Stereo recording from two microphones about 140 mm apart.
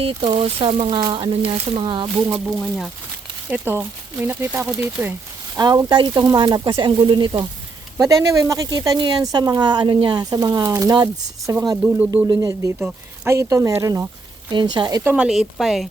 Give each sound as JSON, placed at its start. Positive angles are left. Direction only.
{"t": 0.0, "sound": "speech", "side_deg": -40}
{"t": 2.3, "sound": "speech", "side_deg": 0}
{"t": 3.5, "sound": "speech", "side_deg": -15}
{"t": 5.5, "sound": "speech", "side_deg": -25}
{"t": 7.9, "sound": "speech", "side_deg": -25}
{"t": 11.8, "sound": "speech", "side_deg": -15}
{"t": 12.3, "sound": "speech", "side_deg": -25}
{"t": 14.5, "sound": "speech", "side_deg": -35}
{"t": 15.0, "sound": "speech", "side_deg": -5}